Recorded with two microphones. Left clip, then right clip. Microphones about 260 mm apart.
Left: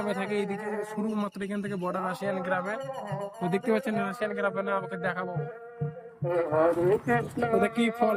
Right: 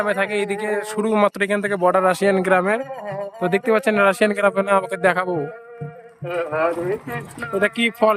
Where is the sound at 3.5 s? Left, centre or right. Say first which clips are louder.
Right 10 dB; centre.